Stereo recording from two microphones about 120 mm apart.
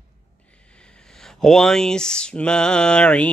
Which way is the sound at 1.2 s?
5° left (ahead or behind).